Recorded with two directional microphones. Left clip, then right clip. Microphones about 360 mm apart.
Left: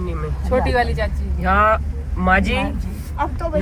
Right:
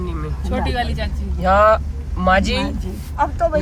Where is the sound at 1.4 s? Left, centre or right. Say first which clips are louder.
Right 3 dB; centre.